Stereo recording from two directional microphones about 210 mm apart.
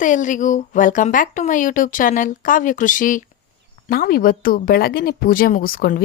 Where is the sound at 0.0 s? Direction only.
35° left (ahead or behind).